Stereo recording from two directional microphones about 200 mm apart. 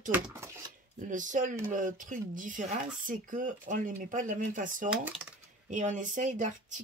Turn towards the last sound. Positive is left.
turn(degrees=-40)  # may be behind; listen again after turning